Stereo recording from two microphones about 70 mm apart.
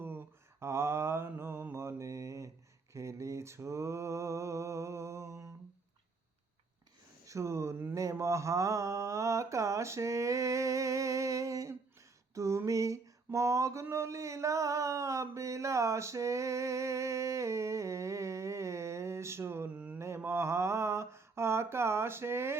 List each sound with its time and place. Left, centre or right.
0.0 s mantra: right
7.3 s a sound: right
19.7 s mantra: right
20.0 s mantra: right